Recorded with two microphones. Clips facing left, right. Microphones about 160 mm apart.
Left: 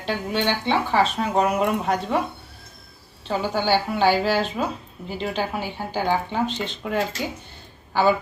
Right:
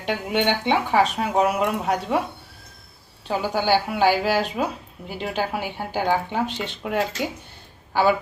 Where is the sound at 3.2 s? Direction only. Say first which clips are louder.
Even; 10° right (ahead or behind).